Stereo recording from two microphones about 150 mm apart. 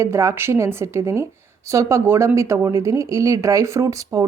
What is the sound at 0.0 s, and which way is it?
Speech, 20° right (ahead or behind).